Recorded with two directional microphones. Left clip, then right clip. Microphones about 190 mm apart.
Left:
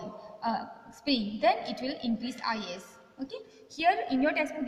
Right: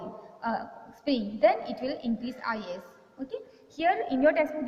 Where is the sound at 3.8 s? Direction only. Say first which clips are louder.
Right 2 dB; 70° left (ahead or behind).